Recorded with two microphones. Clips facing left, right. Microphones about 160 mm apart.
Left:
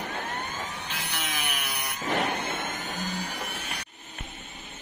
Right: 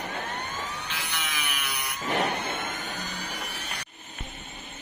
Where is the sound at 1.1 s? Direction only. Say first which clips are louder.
Left 2 dB; 50° left (ahead or behind).